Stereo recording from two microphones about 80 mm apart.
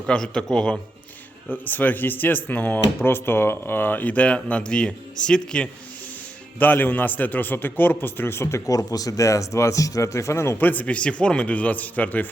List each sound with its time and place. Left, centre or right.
0.0 s a man's voice: centre
1.5 s speech: left
6.6 s a man's voice: left
10.6 s a man's voice: left